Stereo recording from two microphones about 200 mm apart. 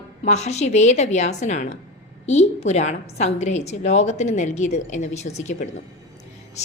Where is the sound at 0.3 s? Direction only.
35° left (ahead or behind).